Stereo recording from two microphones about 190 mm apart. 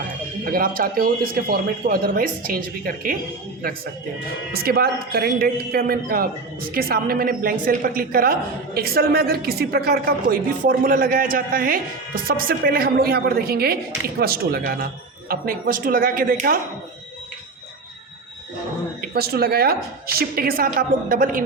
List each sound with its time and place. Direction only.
0.5 s speech: 50° right (ahead or behind)
4.5 s speech: 55° right (ahead or behind)
19.0 s speech: 55° right (ahead or behind)